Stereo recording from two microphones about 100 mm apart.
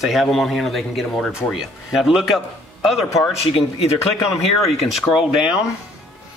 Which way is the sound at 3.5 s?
85° left.